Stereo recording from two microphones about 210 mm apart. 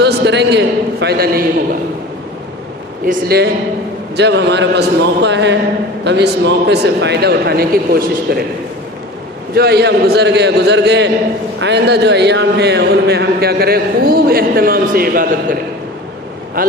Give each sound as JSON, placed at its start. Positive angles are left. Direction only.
{"t": 0.0, "sound": "a man's voice", "side_deg": -55}
{"t": 3.1, "sound": "a man's voice", "side_deg": -50}
{"t": 9.6, "sound": "a man's voice", "side_deg": -50}